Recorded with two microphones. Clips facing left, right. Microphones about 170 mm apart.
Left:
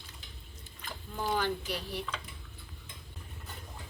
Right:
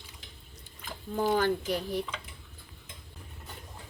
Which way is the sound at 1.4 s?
50° right (ahead or behind).